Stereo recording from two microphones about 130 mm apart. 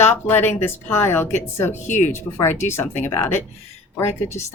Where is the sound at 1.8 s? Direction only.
70° left (ahead or behind).